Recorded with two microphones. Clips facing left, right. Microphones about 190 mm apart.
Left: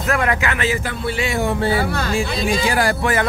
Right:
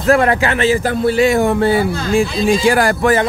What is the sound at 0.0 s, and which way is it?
Speech, 35° right (ahead or behind).